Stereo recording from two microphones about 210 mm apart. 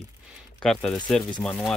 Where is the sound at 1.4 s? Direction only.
5° left (ahead or behind).